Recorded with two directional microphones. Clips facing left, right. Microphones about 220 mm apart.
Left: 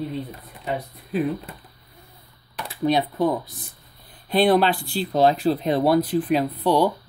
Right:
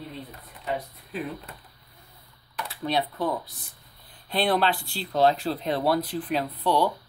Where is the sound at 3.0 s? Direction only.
15° left (ahead or behind).